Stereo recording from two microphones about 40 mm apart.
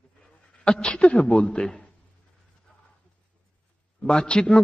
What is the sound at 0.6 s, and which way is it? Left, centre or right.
Speech, left.